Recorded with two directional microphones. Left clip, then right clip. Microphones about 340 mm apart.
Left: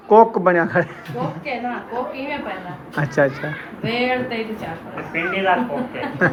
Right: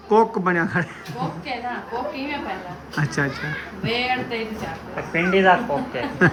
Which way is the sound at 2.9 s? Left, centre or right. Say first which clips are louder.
Left 6 dB; centre.